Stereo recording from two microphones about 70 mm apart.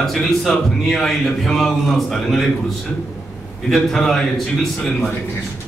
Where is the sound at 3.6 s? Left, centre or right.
Centre.